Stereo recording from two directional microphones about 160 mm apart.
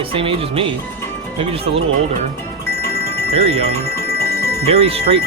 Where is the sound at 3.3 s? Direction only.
40° right (ahead or behind).